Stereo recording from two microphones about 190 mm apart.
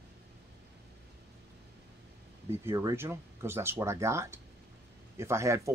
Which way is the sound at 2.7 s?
15° right (ahead or behind).